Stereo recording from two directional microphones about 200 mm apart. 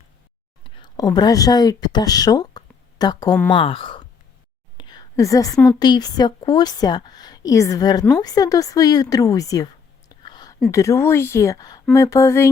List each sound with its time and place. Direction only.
0.6 s a woman's voice: 20° left (ahead or behind)
10.1 s a sound: 20° left (ahead or behind)
10.7 s a woman's voice: 15° left (ahead or behind)